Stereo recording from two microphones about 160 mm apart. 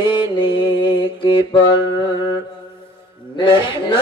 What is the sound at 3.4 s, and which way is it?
Mantra, 30° left (ahead or behind).